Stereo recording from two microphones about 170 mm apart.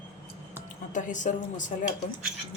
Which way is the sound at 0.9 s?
50° left (ahead or behind).